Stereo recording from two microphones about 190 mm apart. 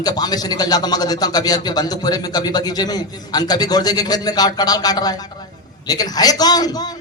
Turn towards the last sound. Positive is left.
turn(degrees=20)  # may be behind; listen again after turning